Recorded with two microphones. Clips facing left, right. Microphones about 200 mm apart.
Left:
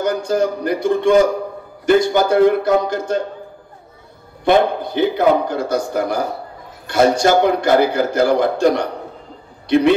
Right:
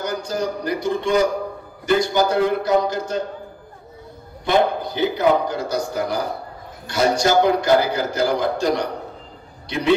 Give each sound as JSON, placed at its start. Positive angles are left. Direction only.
{"t": 0.0, "sound": "speech", "side_deg": 55}
{"t": 4.5, "sound": "a man's voice", "side_deg": 55}